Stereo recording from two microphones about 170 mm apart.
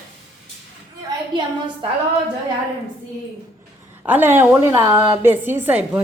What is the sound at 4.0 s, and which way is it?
A woman's voice, 10° right (ahead or behind).